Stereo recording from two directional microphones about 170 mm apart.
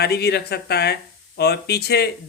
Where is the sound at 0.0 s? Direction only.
70° left (ahead or behind).